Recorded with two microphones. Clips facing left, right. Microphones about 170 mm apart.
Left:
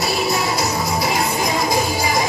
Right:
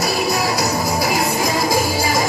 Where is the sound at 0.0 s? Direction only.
25° left (ahead or behind).